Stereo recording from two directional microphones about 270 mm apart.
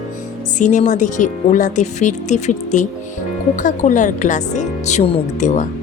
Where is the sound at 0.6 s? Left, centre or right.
Left.